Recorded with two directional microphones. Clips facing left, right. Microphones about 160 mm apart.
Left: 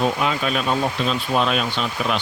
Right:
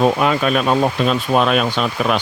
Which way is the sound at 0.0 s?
55° right (ahead or behind).